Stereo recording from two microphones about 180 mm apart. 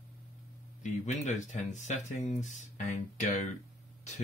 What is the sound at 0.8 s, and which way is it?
Speech, 40° left (ahead or behind).